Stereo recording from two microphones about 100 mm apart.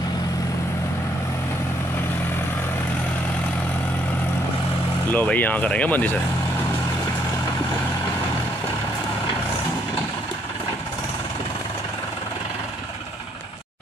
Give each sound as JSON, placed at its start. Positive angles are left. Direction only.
{"t": 5.1, "sound": "speech", "side_deg": 15}